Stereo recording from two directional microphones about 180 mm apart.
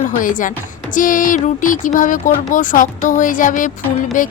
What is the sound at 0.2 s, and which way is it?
Speech, 50° left (ahead or behind).